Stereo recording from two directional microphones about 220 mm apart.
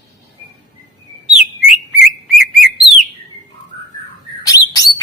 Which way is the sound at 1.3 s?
Centre (ahead or behind).